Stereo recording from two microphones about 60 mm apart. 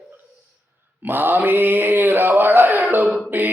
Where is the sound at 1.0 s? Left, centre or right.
Right.